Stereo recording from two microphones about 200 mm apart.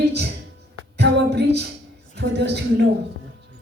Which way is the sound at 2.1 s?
60° right (ahead or behind).